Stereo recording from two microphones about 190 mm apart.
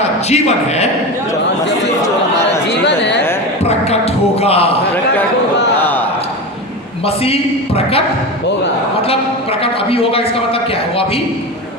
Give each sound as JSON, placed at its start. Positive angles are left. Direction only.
{"t": 0.3, "sound": "a woman's voice", "side_deg": 35}
{"t": 2.8, "sound": "chatter", "side_deg": 65}
{"t": 3.6, "sound": "music", "side_deg": 35}
{"t": 5.8, "sound": "a sound", "side_deg": 10}
{"t": 7.0, "sound": "a woman's voice", "side_deg": 30}
{"t": 9.0, "sound": "a woman's voice", "side_deg": 30}